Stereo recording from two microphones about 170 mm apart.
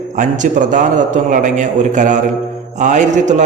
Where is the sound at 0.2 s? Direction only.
45° right (ahead or behind).